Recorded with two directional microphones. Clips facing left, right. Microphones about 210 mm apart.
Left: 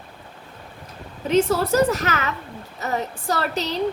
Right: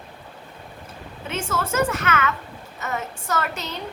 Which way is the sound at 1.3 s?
35° left (ahead or behind).